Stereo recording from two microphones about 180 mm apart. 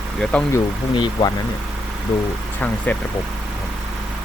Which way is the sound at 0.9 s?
25° left (ahead or behind).